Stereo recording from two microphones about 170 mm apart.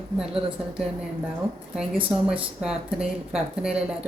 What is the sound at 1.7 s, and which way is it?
Speech, 5° right (ahead or behind).